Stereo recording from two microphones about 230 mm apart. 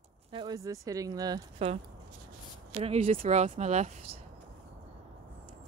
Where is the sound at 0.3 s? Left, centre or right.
Centre.